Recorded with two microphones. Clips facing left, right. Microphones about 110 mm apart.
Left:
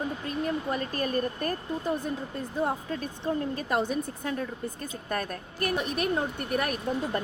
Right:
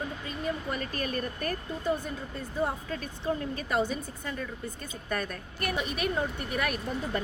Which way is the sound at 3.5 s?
50° left (ahead or behind).